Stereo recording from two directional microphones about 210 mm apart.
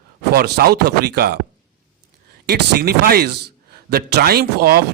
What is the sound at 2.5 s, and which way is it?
A man's voice, 50° right (ahead or behind).